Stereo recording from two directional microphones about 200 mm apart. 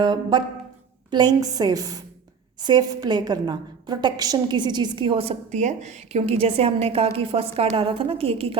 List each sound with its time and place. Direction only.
0.0 s a woman's voice: 20° right (ahead or behind)